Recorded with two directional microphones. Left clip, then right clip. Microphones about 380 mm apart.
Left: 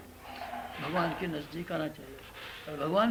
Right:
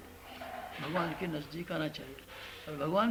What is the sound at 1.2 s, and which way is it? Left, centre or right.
Speech, right.